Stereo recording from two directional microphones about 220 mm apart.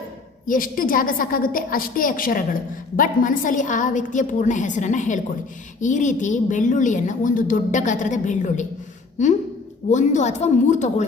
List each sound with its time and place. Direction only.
0.4 s a woman's voice: 40° left (ahead or behind)
9.9 s a woman's voice: 35° left (ahead or behind)